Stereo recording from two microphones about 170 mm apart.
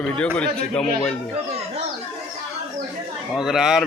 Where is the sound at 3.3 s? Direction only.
5° right (ahead or behind).